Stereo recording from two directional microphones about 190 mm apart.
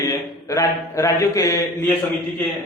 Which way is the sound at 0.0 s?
20° left (ahead or behind).